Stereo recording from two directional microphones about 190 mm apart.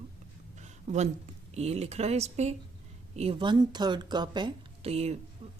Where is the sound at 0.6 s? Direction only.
40° right (ahead or behind).